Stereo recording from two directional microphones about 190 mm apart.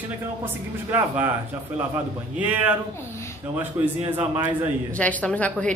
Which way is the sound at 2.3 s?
10° right (ahead or behind).